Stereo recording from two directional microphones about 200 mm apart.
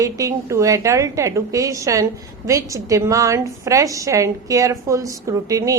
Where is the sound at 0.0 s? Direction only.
15° right (ahead or behind).